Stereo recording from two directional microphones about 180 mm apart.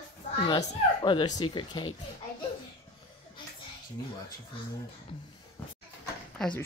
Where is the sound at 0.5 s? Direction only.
25° left (ahead or behind).